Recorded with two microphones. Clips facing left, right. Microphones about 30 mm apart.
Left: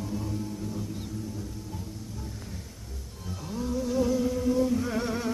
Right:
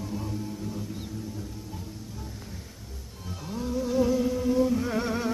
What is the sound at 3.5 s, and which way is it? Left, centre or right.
Music, centre.